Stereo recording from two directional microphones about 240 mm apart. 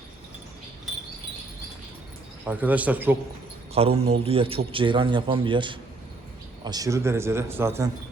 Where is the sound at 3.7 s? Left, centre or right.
Right.